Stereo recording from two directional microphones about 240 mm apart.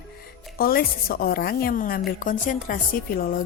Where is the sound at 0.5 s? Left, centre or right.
Left.